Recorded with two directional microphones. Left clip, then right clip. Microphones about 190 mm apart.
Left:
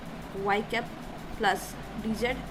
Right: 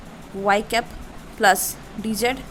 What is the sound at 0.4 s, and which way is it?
Speech, 55° right (ahead or behind).